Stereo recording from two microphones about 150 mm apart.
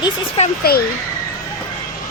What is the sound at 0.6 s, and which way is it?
Speech, 90° left.